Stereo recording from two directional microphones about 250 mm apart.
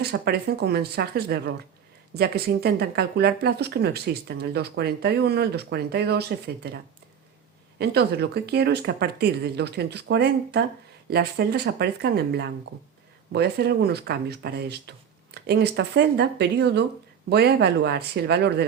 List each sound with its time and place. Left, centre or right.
0.0 s speech: right
7.8 s speech: right